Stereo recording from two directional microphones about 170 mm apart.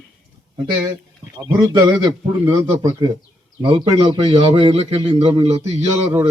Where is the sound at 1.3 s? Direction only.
25° right (ahead or behind).